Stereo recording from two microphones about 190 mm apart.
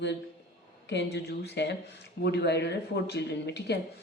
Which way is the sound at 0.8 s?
65° left (ahead or behind).